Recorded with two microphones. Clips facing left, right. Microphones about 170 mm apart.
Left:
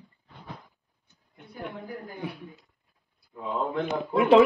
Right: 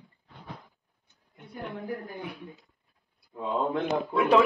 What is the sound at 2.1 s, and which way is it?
Speech, centre (ahead or behind).